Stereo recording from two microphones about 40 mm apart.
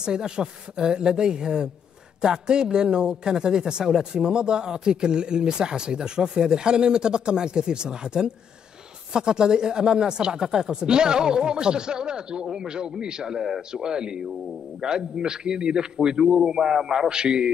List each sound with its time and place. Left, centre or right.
0.0 s a man's voice: centre